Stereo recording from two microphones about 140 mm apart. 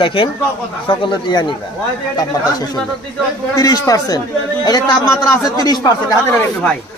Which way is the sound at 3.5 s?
25° left (ahead or behind).